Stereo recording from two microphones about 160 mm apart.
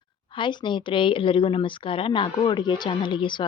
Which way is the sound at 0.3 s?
30° left (ahead or behind).